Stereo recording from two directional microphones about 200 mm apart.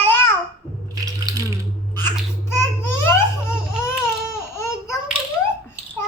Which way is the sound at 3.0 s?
15° left (ahead or behind).